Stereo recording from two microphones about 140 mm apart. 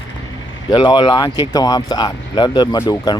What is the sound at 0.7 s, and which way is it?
Speech, 30° left (ahead or behind).